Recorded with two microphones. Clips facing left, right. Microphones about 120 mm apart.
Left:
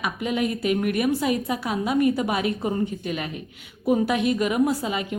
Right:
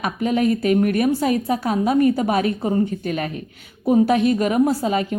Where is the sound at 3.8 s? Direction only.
35° right (ahead or behind).